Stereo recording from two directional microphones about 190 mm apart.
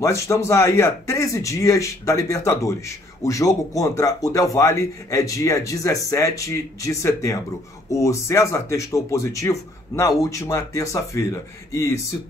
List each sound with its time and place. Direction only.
0.0 s speech: 15° left (ahead or behind)